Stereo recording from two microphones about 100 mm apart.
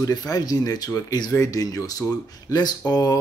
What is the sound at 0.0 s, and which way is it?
Speech, 40° left (ahead or behind).